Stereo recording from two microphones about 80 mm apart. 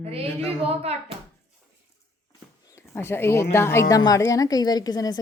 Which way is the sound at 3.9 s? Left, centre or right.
Left.